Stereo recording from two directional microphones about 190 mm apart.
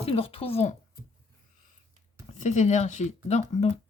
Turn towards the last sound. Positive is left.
turn(degrees=40)  # may be behind; listen again after turning